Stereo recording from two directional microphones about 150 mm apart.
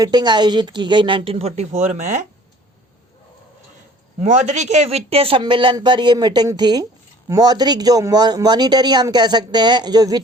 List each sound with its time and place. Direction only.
0.0 s speech: 30° right (ahead or behind); by 2.2 s 50° right (ahead or behind)
4.2 s a man's voice: 50° right (ahead or behind); by 10.2 s 25° right (ahead or behind)